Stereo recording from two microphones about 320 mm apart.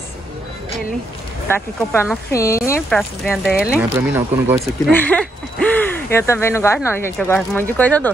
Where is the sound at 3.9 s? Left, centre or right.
Centre.